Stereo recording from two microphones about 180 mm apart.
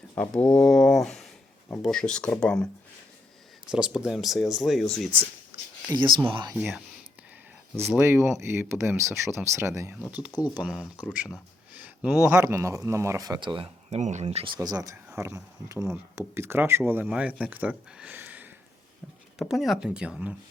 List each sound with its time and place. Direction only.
0.2 s speech: 10° left (ahead or behind)
3.7 s speech: 5° right (ahead or behind)
5.9 s speech: 25° right (ahead or behind)
6.6 s speech: 5° right (ahead or behind)
7.9 s speech: 15° right (ahead or behind)
10.6 s speech: centre (ahead or behind)